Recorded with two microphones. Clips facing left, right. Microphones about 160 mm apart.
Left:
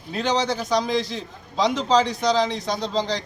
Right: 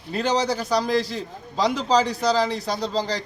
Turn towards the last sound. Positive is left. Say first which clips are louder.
# left 1 dB
turn(degrees=-5)  # may be behind; listen again after turning